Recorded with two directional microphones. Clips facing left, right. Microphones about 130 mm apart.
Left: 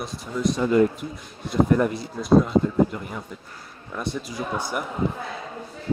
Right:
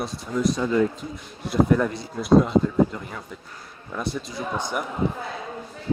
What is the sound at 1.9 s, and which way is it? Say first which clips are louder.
Speech: right 1 dB; centre (ahead or behind).